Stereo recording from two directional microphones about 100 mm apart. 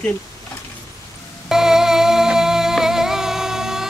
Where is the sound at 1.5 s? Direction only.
5° right (ahead or behind).